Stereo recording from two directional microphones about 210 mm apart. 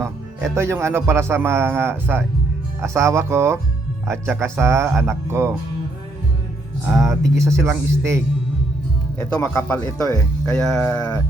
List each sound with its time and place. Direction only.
0.0 s speech: 10° right (ahead or behind)
6.8 s speech: 15° right (ahead or behind)
9.3 s music: 5° left (ahead or behind)
9.8 s speech: 15° left (ahead or behind)
10.4 s music: 5° left (ahead or behind)